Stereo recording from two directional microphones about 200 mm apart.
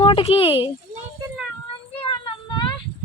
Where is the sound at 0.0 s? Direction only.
30° left (ahead or behind).